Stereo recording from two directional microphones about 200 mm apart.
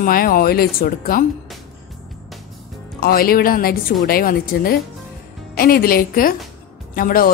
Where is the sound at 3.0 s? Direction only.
50° left (ahead or behind).